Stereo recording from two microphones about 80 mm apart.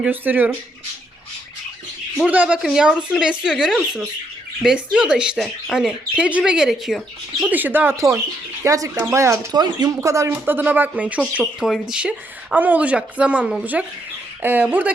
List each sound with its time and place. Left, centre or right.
0.0 s speech: right
2.2 s speech: centre
7.5 s speech: right
8.6 s speech: right
9.5 s speech: right
9.9 s speech: right; by 11.2 s centre
11.6 s speech: centre
11.9 s speech: centre